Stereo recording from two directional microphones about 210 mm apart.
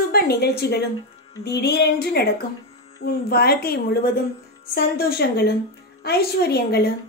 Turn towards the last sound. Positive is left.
turn(degrees=50)  # may be behind; listen again after turning